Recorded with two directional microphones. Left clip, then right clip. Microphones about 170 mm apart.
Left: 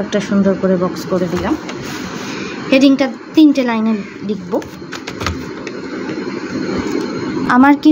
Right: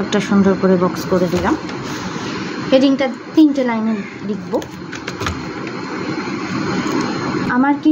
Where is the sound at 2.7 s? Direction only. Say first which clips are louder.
Left 2 dB; 40° left (ahead or behind).